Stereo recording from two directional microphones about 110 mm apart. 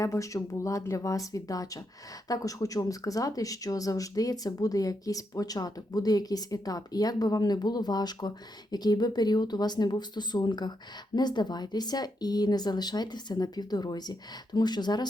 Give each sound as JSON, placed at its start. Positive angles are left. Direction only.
{"t": 0.0, "sound": "speech", "side_deg": 30}